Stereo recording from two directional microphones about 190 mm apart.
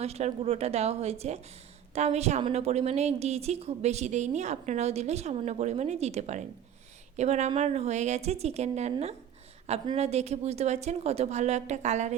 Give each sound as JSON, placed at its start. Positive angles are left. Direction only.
{"t": 0.0, "sound": "a woman's voice", "side_deg": -35}